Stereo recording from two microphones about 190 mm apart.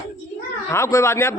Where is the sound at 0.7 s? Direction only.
15° left (ahead or behind).